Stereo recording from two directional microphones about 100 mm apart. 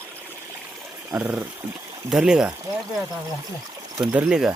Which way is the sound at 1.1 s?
15° right (ahead or behind).